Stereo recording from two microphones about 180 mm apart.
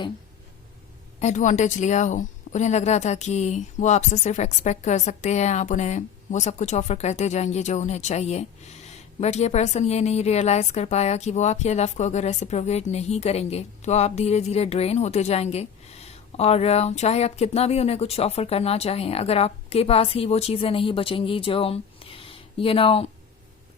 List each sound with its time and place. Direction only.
1.2 s a woman's voice: 45° left (ahead or behind)